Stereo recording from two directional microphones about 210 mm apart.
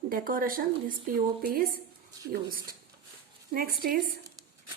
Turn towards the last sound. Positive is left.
turn(degrees=-45)  # may be behind; listen again after turning